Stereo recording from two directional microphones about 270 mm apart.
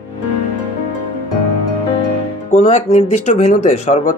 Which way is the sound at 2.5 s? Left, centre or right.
Left.